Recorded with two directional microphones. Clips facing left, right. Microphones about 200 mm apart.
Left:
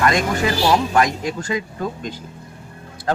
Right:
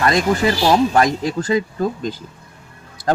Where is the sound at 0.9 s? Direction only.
35° right (ahead or behind).